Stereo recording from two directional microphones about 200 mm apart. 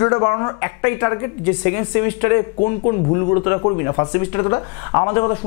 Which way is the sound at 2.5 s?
35° left (ahead or behind).